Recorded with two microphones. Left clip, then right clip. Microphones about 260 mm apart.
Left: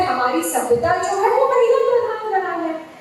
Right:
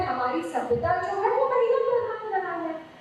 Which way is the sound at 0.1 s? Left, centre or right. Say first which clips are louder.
Left 8 dB; centre.